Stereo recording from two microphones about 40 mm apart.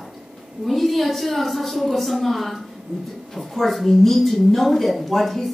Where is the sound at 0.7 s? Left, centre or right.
Centre.